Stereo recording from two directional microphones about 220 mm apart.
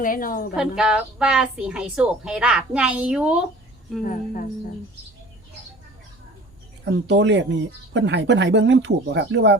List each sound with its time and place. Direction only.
0.0 s a woman's voice: 40° left (ahead or behind)
0.5 s a woman's voice: 5° right (ahead or behind)
4.0 s a woman's voice: 35° left (ahead or behind)
7.1 s speech: 55° right (ahead or behind)